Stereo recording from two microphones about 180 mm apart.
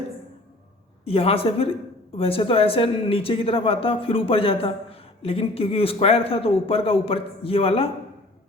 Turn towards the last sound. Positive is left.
turn(degrees=30)  # may be behind; listen again after turning